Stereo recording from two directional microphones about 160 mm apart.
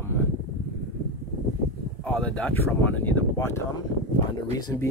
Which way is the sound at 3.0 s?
15° left (ahead or behind).